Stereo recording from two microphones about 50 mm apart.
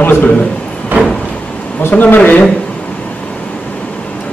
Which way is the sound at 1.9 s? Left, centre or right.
Left.